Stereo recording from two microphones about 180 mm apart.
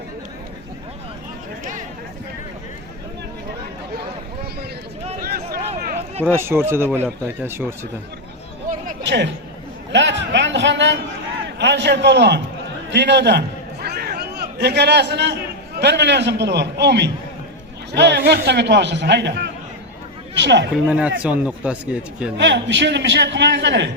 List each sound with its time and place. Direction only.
5.2 s a sound: 55° right (ahead or behind)
6.2 s speech: 15° right (ahead or behind)
9.0 s a man's voice: 75° right (ahead or behind)
20.8 s speech: 5° right (ahead or behind)
22.4 s a man's voice: 75° right (ahead or behind)